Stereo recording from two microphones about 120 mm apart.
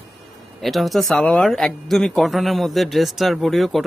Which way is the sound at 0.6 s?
Centre (ahead or behind).